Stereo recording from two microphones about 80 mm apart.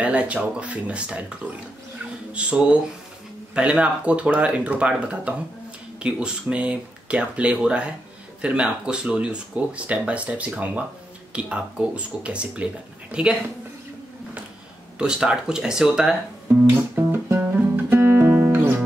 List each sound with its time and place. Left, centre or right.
0.0 s speech: centre
15.0 s speech: centre
16.6 s music: right